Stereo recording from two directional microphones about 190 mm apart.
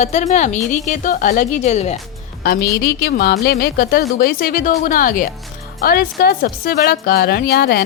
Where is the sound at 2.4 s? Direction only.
55° left (ahead or behind).